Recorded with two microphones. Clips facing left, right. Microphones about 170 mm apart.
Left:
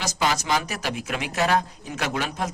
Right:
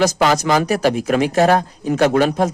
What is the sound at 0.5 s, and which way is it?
Speech, 50° right (ahead or behind).